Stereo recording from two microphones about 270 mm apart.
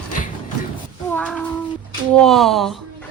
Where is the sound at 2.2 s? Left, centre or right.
Centre.